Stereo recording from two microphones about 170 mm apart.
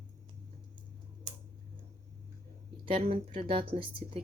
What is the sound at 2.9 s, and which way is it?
Speech, 30° right (ahead or behind).